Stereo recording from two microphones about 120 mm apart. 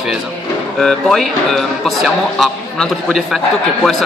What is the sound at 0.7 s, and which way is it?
A man's voice, 5° left (ahead or behind).